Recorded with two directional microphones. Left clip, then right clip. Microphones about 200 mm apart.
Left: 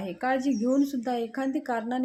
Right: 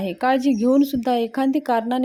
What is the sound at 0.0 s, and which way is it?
A woman's voice, 40° right (ahead or behind).